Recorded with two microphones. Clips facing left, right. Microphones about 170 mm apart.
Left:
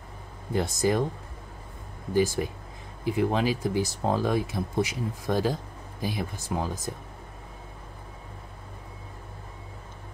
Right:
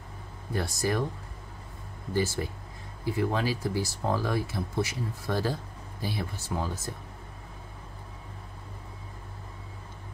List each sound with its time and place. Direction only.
0.5 s speech: 20° left (ahead or behind)
2.1 s speech: 15° left (ahead or behind)